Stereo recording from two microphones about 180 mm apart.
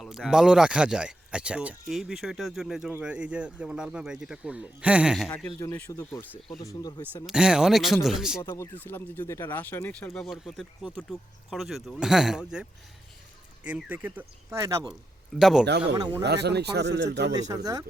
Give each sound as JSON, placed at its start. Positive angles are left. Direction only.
{"t": 0.0, "sound": "speech", "side_deg": 0}
{"t": 5.3, "sound": "speech", "side_deg": 10}
{"t": 7.3, "sound": "speech", "side_deg": -5}
{"t": 8.4, "sound": "speech", "side_deg": 15}
{"t": 13.7, "sound": "speech", "side_deg": -10}
{"t": 15.4, "sound": "speech", "side_deg": 0}
{"t": 15.9, "sound": "speech", "side_deg": -25}
{"t": 16.2, "sound": "speech", "side_deg": -70}
{"t": 17.5, "sound": "speech", "side_deg": -20}